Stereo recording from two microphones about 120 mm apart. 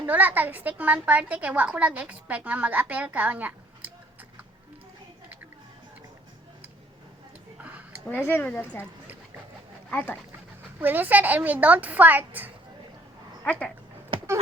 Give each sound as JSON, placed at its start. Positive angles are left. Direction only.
{"t": 0.0, "sound": "a woman's voice", "side_deg": -15}
{"t": 7.6, "sound": "a sound", "side_deg": -10}
{"t": 8.2, "sound": "speech", "side_deg": 15}
{"t": 9.9, "sound": "speech", "side_deg": 15}
{"t": 10.8, "sound": "a woman's voice", "side_deg": -15}
{"t": 13.4, "sound": "speech", "side_deg": 10}